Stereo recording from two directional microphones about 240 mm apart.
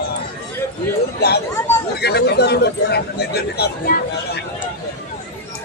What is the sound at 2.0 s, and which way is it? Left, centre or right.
Speech, left.